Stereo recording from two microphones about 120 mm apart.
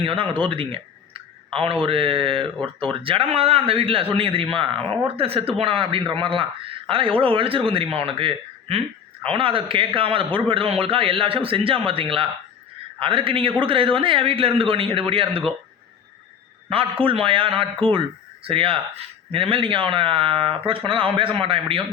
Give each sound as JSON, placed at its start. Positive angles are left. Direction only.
{"t": 0.0, "sound": "speech", "side_deg": -50}
{"t": 17.0, "sound": "speech", "side_deg": -50}